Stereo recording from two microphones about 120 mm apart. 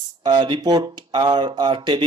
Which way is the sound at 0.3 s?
40° right (ahead or behind).